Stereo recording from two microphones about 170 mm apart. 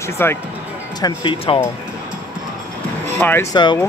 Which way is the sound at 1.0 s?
25° left (ahead or behind).